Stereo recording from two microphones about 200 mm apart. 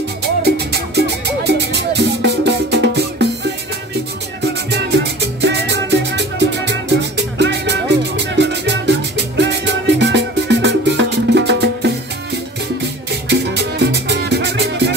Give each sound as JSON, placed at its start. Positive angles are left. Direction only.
{"t": 0.4, "sound": "music", "side_deg": -55}
{"t": 4.7, "sound": "music", "side_deg": -60}
{"t": 13.3, "sound": "music", "side_deg": -55}